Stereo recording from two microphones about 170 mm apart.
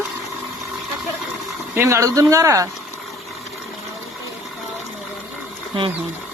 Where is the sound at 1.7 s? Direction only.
15° right (ahead or behind).